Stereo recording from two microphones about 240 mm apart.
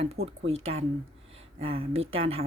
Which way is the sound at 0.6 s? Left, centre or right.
Right.